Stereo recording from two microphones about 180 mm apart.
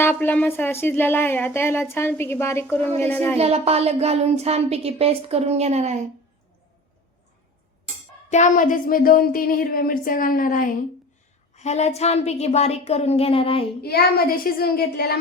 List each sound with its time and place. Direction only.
0.0 s speech: 10° left (ahead or behind)
3.3 s speech: 35° right (ahead or behind)
8.3 s speech: 40° left (ahead or behind)
11.5 s a woman's voice: 40° left (ahead or behind)
13.8 s a child's voice: 55° left (ahead or behind)